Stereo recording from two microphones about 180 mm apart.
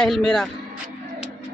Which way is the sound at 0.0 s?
5° left (ahead or behind).